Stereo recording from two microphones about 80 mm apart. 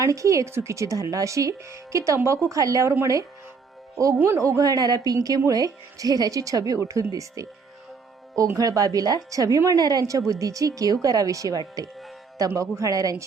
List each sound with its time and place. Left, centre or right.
0.0 s speech: right
4.4 s speech: right
8.5 s speech: right